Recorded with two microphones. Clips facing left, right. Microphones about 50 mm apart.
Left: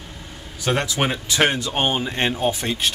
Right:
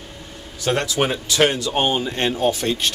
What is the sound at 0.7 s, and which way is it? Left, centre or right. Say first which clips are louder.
Speech: right 1 dB; centre.